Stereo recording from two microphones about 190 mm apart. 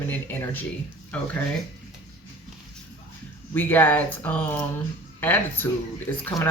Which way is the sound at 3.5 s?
10° left (ahead or behind).